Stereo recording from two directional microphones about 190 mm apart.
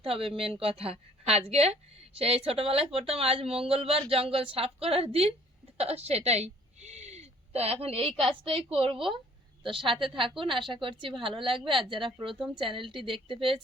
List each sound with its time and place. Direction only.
0.0 s a woman's voice: 30° right (ahead or behind)
5.7 s a sound: 35° right (ahead or behind)
8.2 s a woman's voice: 30° right (ahead or behind)